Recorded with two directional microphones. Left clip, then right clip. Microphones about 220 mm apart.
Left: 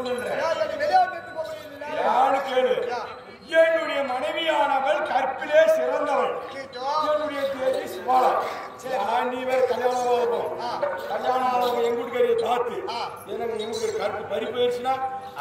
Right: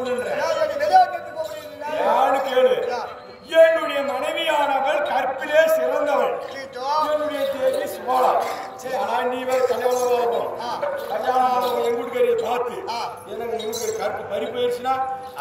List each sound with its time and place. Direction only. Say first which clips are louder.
0.2 s a sound: right 3 dB; 5° right (ahead or behind)
3.5 s a man's voice: right 4 dB; centre (ahead or behind)
7.8 s a man's voice: right 1 dB; 5° left (ahead or behind)
11.2 s a man's voice: right 3 dB; 15° left (ahead or behind)
13.7 s a man's voice: right 2 dB; 10° right (ahead or behind)
13.9 s a man's voice: right 2 dB; 15° left (ahead or behind)